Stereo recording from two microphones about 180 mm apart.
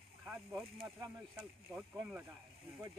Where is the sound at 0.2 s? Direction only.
5° right (ahead or behind).